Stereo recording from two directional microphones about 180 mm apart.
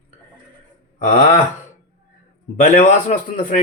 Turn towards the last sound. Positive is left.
turn(degrees=50)  # may be behind; listen again after turning